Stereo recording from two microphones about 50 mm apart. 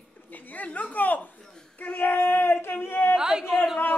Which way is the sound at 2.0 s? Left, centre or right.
Left.